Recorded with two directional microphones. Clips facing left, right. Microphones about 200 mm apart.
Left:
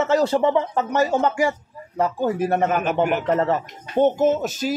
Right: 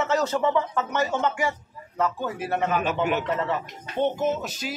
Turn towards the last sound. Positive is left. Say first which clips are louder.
# left 7 dB
turn(degrees=45)  # may be behind; listen again after turning